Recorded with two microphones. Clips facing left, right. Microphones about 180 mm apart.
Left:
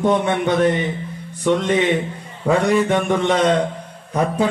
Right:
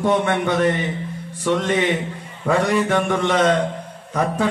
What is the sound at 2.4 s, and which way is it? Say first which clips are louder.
Speech: left 2 dB; 15° left (ahead or behind).